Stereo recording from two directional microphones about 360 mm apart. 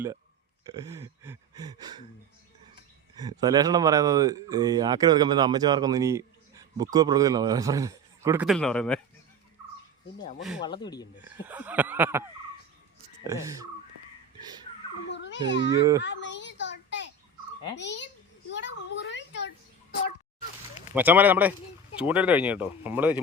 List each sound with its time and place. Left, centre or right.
0.7 s speech: centre
3.2 s speech: centre
10.6 s speech: centre
11.4 s speech: centre
13.2 s speech: centre
15.1 s babbling: left
15.7 s speech: centre
16.0 s a sound: left
17.7 s a child's voice: left
18.5 s a sound: left
20.9 s speech: centre